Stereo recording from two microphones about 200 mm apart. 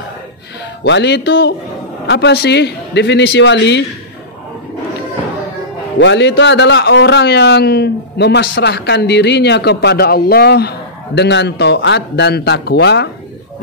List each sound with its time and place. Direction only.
0.8 s a man's voice: 60° left (ahead or behind)
5.9 s a man's voice: 65° left (ahead or behind)